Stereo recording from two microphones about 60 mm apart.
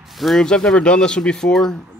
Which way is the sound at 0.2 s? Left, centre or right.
Centre.